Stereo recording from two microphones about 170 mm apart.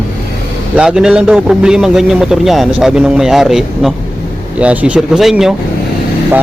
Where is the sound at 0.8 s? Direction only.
5° right (ahead or behind).